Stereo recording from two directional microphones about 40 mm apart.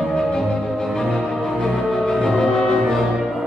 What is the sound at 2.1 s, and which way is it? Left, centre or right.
Music, centre.